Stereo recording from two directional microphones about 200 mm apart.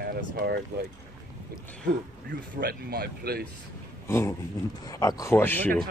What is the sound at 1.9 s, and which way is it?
Speech, 50° right (ahead or behind).